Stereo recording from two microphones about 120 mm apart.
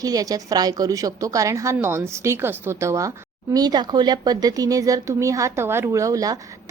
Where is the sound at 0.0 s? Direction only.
30° right (ahead or behind).